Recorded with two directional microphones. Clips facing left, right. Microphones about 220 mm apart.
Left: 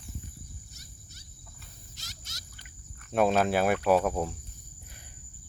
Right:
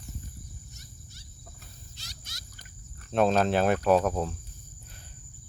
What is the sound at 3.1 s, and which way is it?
Cricket, 10° left (ahead or behind).